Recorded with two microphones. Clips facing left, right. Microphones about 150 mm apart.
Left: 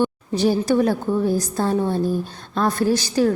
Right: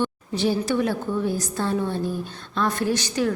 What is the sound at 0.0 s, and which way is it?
A woman's voice, 40° left (ahead or behind).